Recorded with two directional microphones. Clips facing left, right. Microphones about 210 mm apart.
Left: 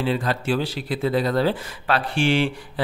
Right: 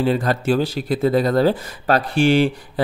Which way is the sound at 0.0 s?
45° right (ahead or behind).